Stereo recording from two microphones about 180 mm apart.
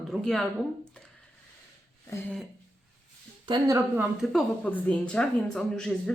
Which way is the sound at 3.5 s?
20° right (ahead or behind).